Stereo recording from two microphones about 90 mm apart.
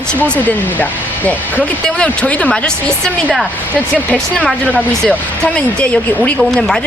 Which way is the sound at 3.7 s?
15° left (ahead or behind).